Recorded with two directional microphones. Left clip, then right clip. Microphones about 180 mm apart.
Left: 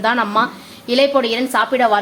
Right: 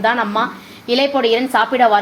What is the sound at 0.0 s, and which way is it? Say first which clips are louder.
A woman's voice: even; 15° left (ahead or behind).